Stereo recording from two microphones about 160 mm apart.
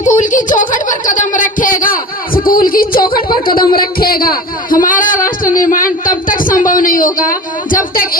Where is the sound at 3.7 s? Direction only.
70° left (ahead or behind).